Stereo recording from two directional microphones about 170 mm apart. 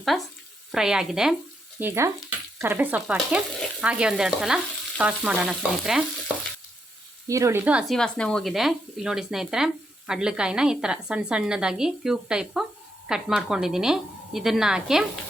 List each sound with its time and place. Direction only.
0.1 s speech: centre (ahead or behind)
1.8 s stir: 15° right (ahead or behind)
7.3 s speech: 15° right (ahead or behind)